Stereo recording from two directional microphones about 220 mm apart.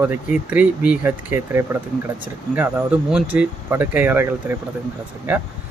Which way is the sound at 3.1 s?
5° right (ahead or behind).